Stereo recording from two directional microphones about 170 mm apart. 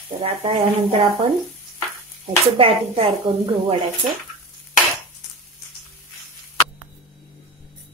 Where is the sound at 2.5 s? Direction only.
35° right (ahead or behind).